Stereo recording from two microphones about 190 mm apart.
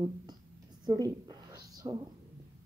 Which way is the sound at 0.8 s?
20° right (ahead or behind).